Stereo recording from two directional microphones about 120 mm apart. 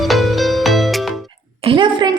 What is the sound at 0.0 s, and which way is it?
Music, centre (ahead or behind).